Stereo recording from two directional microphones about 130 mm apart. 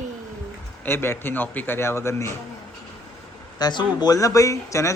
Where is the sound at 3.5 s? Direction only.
30° left (ahead or behind).